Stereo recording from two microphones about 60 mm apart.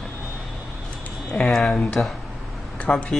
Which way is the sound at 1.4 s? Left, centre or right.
Centre.